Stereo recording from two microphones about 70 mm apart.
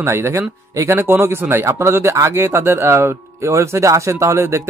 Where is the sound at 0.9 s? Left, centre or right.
Right.